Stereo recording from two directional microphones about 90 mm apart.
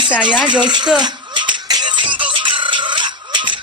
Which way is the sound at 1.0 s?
60° right (ahead or behind).